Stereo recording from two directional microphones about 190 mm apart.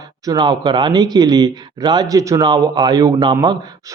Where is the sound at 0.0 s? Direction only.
20° right (ahead or behind).